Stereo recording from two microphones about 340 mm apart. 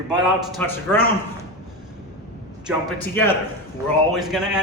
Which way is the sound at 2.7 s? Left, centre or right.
Centre.